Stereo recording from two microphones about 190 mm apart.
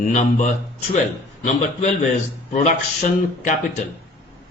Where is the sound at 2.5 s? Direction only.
40° left (ahead or behind).